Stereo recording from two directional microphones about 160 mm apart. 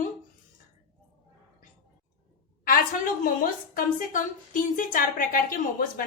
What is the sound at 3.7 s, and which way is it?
A woman's voice, 60° left (ahead or behind).